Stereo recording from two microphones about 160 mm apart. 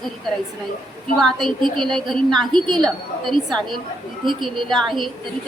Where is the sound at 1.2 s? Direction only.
Centre (ahead or behind).